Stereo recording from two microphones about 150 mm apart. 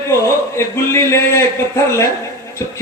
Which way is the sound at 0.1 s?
20° left (ahead or behind).